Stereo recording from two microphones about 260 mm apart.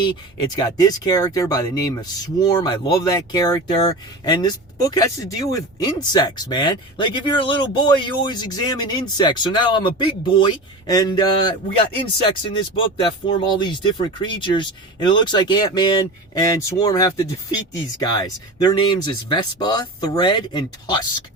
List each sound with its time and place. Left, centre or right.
0.5 s speech: centre